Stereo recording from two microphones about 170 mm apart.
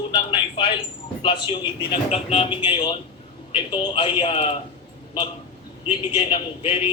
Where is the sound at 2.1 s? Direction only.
35° left (ahead or behind).